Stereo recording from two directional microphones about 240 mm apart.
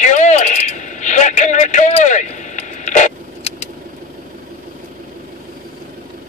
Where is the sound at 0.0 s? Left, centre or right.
Left.